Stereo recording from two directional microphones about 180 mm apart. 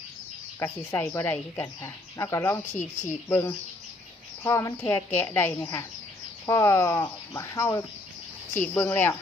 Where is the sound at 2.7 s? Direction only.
40° left (ahead or behind).